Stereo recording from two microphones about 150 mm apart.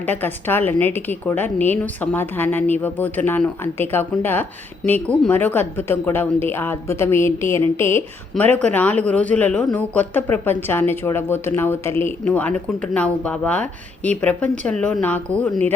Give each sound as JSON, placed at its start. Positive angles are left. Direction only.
{"t": 0.0, "sound": "speech", "side_deg": 10}